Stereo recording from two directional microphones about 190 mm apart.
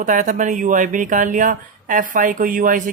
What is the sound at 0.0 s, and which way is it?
A man's voice, 40° right (ahead or behind).